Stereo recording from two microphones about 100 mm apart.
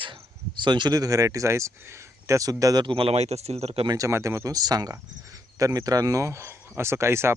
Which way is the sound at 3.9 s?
30° right (ahead or behind).